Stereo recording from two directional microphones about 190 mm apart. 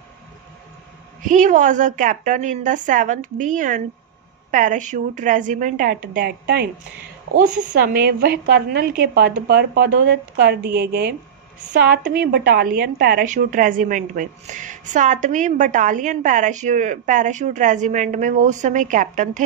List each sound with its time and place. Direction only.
1.2 s a woman's voice: 45° right (ahead or behind)
6.1 s a woman's voice: 60° right (ahead or behind); by 19.4 s 40° right (ahead or behind)